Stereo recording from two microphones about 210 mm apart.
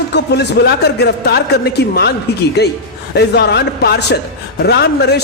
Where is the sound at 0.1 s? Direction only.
50° left (ahead or behind).